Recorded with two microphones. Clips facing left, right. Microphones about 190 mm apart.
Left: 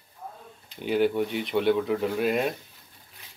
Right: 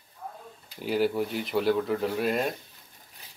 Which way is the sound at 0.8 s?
Centre (ahead or behind).